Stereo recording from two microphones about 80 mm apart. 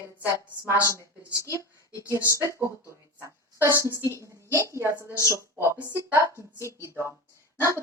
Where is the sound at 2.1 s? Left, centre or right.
Right.